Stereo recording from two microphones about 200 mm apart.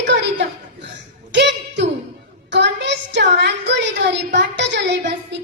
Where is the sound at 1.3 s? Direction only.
60° right (ahead or behind).